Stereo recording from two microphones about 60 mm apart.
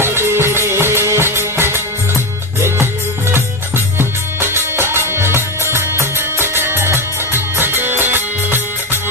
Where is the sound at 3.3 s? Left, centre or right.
Right.